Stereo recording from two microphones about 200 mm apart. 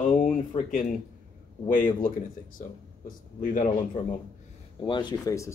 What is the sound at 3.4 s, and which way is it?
Speech, 40° left (ahead or behind).